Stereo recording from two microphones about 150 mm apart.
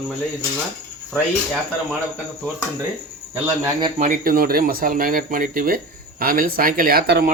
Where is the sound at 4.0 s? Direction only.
70° right (ahead or behind); by 7.3 s 90° right.